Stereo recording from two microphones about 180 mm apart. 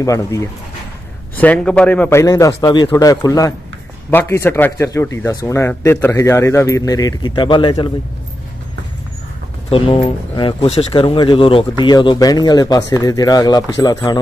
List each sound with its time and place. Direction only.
0.0 s speech: 15° left (ahead or behind)
9.7 s speech: 30° left (ahead or behind)